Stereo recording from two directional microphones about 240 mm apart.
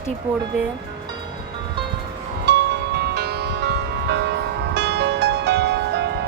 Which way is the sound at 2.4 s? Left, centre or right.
Right.